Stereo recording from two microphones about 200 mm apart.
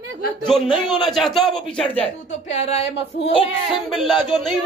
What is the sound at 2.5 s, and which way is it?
Speech, 30° left (ahead or behind).